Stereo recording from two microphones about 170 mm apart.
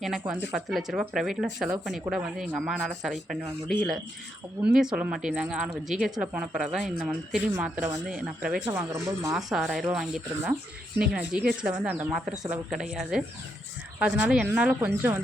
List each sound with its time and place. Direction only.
0.0 s speech: centre (ahead or behind)
8.7 s speech: 15° right (ahead or behind)
9.3 s speech: 5° right (ahead or behind)
10.4 s speech: 15° right (ahead or behind)
14.3 s speech: 5° right (ahead or behind)